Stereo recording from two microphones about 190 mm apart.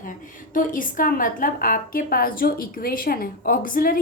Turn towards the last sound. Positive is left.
turn(degrees=50)  # may be behind; listen again after turning